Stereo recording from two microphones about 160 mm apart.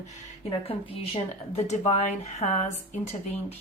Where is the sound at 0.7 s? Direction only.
40° left (ahead or behind).